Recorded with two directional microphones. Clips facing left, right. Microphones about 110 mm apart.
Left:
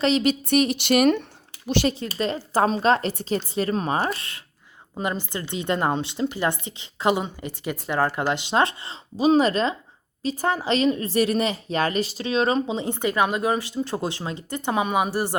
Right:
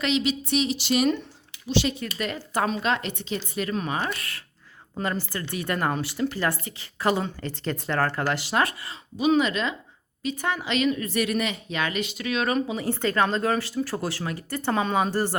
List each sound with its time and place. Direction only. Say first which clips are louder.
0.0 s a woman's voice: left 4 dB; 45° left (ahead or behind)
1.9 s a woman's voice: left 4 dB; 35° left (ahead or behind); by 15.4 s 15° left (ahead or behind)